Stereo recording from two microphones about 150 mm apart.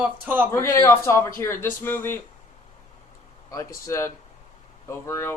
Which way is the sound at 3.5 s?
20° left (ahead or behind).